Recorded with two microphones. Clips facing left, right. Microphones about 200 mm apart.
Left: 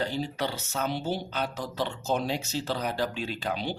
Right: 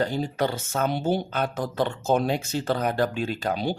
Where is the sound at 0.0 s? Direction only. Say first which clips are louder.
Right 5 dB; 50° right (ahead or behind).